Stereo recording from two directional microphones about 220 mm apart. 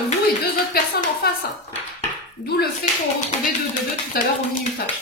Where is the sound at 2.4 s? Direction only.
50° left (ahead or behind).